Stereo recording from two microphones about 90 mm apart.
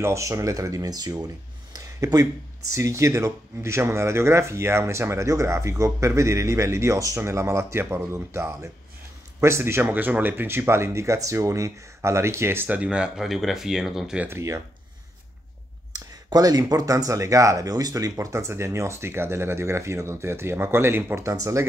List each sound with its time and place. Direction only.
0.0 s speech: 35° right (ahead or behind)
2.7 s speech: 35° right (ahead or behind)
9.8 s speech: 20° right (ahead or behind)
14.2 s speech: 30° right (ahead or behind)
15.9 s speech: 45° right (ahead or behind)